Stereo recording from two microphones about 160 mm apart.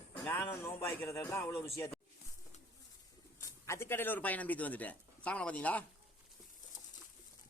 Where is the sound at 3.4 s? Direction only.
15° left (ahead or behind).